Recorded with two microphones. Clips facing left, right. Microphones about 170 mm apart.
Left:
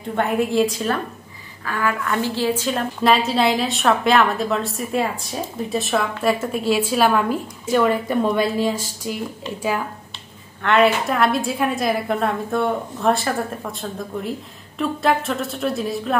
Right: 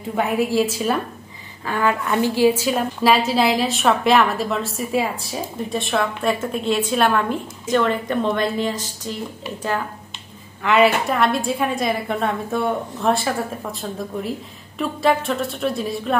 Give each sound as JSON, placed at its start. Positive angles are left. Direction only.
{"t": 0.1, "sound": "a woman's voice", "side_deg": -5}
{"t": 1.7, "sound": "a woman's voice", "side_deg": -25}
{"t": 10.6, "sound": "a woman's voice", "side_deg": -5}